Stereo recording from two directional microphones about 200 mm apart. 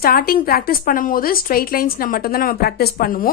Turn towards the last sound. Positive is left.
turn(degrees=45)  # may be behind; listen again after turning